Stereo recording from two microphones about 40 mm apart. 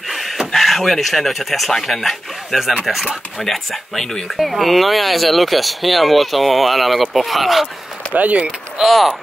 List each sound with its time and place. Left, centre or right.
0.5 s speech: centre
3.3 s speech: centre
8.1 s speech: right
8.8 s speech: centre